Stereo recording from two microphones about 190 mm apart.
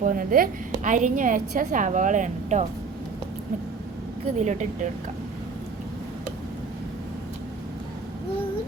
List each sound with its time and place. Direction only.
0.0 s a woman's voice: 45° right (ahead or behind)
4.4 s speech: 40° right (ahead or behind)